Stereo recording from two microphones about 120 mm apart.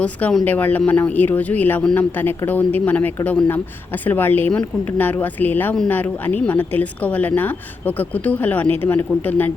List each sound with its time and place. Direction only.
0.0 s a woman's voice: 10° left (ahead or behind)
2.1 s a woman's voice: 15° left (ahead or behind)